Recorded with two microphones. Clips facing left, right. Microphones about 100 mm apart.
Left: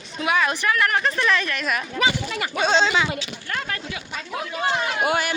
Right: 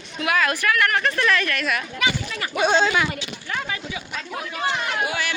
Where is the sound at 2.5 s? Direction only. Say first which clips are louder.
Right 1 dB; 10° right (ahead or behind).